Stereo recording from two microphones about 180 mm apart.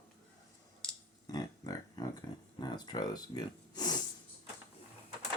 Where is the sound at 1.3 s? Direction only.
20° left (ahead or behind).